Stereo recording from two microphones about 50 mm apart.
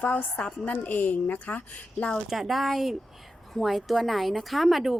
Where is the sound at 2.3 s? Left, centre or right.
Centre.